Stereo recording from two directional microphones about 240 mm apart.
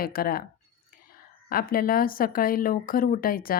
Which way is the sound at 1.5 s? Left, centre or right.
Left.